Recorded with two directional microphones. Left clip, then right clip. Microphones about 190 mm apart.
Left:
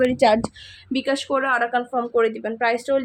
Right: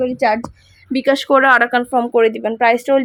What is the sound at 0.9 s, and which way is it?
Speech, 35° right (ahead or behind).